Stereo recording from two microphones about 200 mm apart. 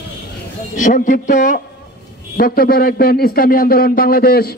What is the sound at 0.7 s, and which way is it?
A man's voice, 40° left (ahead or behind).